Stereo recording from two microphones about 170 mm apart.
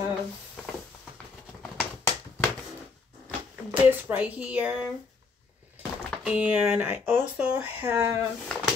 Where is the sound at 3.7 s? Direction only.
10° right (ahead or behind).